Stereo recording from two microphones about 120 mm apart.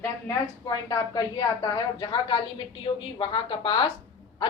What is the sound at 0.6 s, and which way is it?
A woman's voice, 35° left (ahead or behind).